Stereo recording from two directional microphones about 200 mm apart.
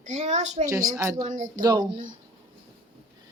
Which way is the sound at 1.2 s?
40° right (ahead or behind).